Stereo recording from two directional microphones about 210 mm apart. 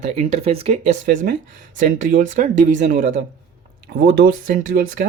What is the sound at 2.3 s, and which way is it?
Speech, 35° right (ahead or behind).